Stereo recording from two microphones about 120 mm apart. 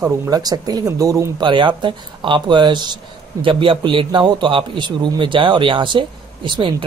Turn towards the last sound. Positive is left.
turn(degrees=-45)  # may be behind; listen again after turning